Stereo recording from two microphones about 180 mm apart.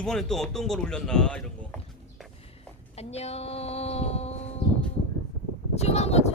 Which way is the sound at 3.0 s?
35° left (ahead or behind).